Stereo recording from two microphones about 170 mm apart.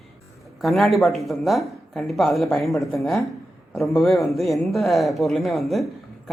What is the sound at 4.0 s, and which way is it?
Speech, centre (ahead or behind).